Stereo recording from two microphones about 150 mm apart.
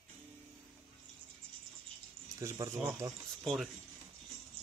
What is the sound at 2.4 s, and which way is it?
Speech, 20° right (ahead or behind).